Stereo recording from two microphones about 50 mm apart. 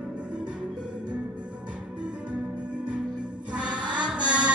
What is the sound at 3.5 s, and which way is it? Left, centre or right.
Music, right.